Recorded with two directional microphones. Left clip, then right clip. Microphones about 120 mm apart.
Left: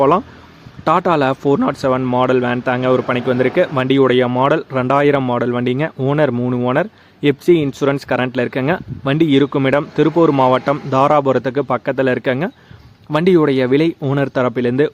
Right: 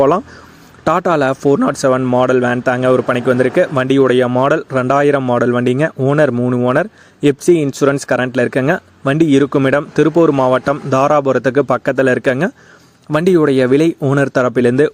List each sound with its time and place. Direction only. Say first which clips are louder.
0.9 s a man's voice: right 1 dB; 30° right (ahead or behind)